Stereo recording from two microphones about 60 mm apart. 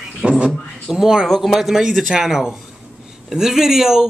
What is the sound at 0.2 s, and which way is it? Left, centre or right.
Speech, centre.